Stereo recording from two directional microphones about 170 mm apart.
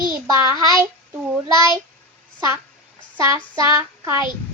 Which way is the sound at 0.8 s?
10° right (ahead or behind).